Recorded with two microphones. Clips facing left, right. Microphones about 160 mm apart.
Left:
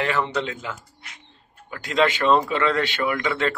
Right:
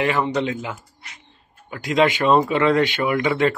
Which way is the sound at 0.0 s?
15° right (ahead or behind).